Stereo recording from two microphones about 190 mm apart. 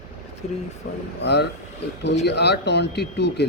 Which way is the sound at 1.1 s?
60° left (ahead or behind).